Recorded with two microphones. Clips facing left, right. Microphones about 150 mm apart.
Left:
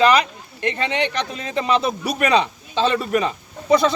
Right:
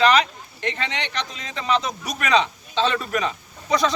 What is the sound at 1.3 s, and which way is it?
Speech, 50° left (ahead or behind).